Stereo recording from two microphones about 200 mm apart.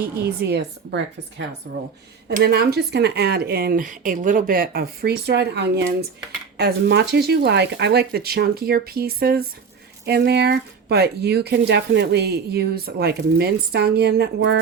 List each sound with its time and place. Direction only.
0.0 s speech: 50° right (ahead or behind)